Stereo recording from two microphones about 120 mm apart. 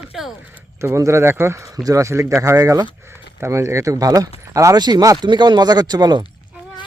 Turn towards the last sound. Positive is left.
turn(degrees=-35)  # may be behind; listen again after turning